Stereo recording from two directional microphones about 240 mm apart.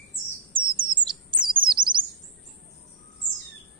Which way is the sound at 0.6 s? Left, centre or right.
Right.